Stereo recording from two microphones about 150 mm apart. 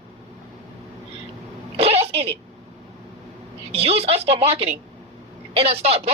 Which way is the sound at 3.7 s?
40° right (ahead or behind).